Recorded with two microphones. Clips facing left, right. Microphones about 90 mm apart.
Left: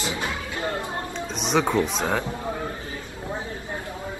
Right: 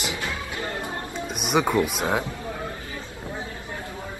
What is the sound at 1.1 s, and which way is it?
Speech, 10° right (ahead or behind).